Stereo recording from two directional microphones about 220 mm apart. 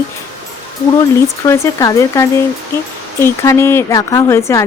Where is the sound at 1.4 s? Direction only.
15° left (ahead or behind).